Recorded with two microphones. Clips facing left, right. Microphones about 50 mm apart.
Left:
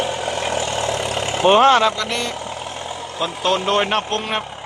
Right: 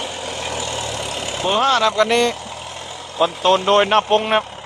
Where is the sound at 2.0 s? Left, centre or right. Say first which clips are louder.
Right 8 dB; right.